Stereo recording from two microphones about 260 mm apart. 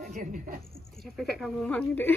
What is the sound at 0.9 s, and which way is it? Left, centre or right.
Speech, centre.